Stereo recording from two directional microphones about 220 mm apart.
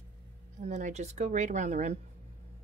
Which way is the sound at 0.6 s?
35° right (ahead or behind).